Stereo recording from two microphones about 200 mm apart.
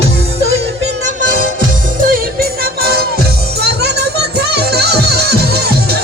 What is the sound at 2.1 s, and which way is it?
Music, 45° right (ahead or behind).